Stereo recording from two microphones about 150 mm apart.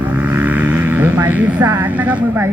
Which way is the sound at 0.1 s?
10° right (ahead or behind).